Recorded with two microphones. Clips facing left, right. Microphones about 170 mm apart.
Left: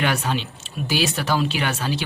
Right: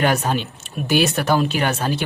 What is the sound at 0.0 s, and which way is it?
Speech, 45° right (ahead or behind).